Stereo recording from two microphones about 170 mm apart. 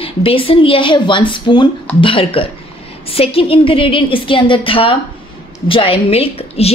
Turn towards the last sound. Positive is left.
turn(degrees=35)  # may be behind; listen again after turning